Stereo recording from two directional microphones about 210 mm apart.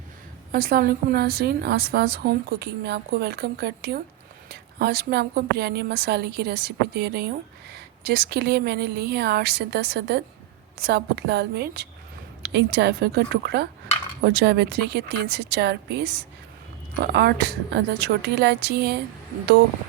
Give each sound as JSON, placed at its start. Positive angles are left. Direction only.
{"t": 0.5, "sound": "a woman's voice", "side_deg": -45}